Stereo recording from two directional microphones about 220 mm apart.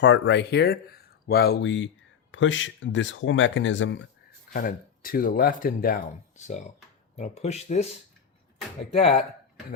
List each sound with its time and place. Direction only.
0.0 s speech: 55° left (ahead or behind)
4.5 s speech: 40° left (ahead or behind)
8.9 s speech: 30° left (ahead or behind)